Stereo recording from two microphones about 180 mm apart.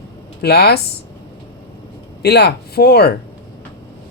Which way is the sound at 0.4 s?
65° left (ahead or behind).